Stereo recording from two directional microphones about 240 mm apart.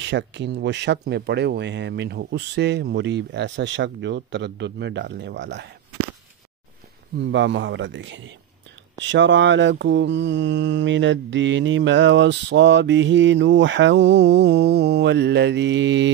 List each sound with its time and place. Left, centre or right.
0.0 s mantra: right
7.2 s mantra: right